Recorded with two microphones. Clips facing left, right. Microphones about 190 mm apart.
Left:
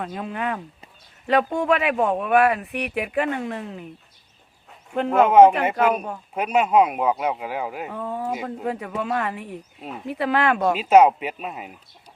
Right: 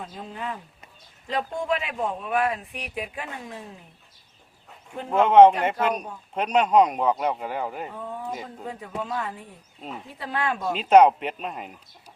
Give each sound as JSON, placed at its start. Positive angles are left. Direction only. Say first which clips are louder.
{"t": 0.0, "sound": "speech", "louder": "left 7 dB", "side_deg": 70}
{"t": 5.2, "sound": "speech", "louder": "left 1 dB", "side_deg": 10}
{"t": 5.9, "sound": "speech", "louder": "left 5 dB", "side_deg": 60}
{"t": 6.3, "sound": "speech", "louder": "left 1 dB", "side_deg": 5}
{"t": 7.9, "sound": "speech", "louder": "left 6 dB", "side_deg": 75}
{"t": 10.8, "sound": "speech", "louder": "right 1 dB", "side_deg": 5}